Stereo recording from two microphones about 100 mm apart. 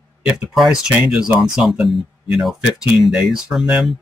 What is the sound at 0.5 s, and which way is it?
Speech, 5° right (ahead or behind).